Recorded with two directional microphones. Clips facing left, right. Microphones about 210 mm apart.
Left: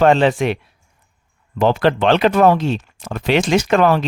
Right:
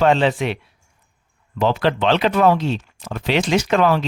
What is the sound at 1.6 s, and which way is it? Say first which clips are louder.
Speech: left 3 dB; 50° left (ahead or behind).